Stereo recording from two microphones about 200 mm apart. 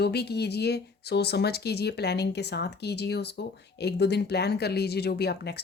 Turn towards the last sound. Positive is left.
turn(degrees=55)  # may be behind; listen again after turning